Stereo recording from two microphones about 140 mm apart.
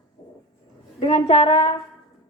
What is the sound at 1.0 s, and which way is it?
Speech, 40° left (ahead or behind).